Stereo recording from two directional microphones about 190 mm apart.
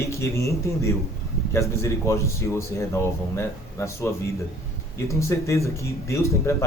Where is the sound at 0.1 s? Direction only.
15° left (ahead or behind).